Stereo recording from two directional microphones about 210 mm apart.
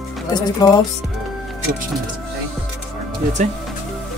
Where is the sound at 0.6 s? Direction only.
20° left (ahead or behind).